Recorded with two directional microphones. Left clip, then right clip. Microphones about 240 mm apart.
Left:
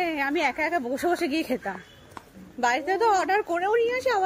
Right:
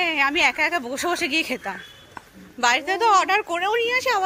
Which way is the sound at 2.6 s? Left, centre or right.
Centre.